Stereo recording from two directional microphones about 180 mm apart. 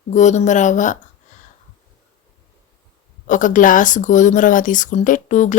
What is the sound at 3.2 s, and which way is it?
Speech, 45° left (ahead or behind).